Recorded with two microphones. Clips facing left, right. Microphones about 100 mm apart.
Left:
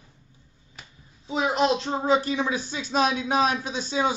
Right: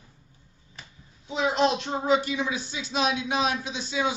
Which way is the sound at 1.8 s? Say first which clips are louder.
Left 1 dB; 30° left (ahead or behind).